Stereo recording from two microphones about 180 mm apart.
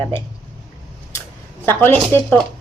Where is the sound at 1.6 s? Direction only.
10° left (ahead or behind).